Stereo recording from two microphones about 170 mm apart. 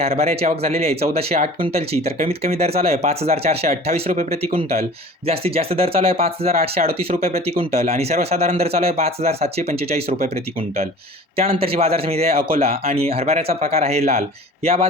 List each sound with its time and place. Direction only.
0.0 s speech: 35° right (ahead or behind)
11.3 s speech: 35° right (ahead or behind)